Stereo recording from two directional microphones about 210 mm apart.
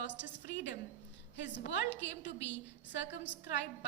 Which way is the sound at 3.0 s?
55° left (ahead or behind).